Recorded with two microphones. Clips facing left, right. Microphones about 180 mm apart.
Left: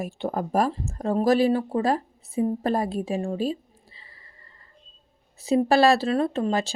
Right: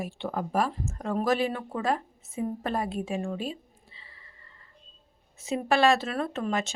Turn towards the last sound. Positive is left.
turn(degrees=30)  # may be behind; listen again after turning